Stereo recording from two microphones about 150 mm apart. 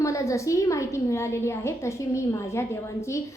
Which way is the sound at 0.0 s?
20° left (ahead or behind).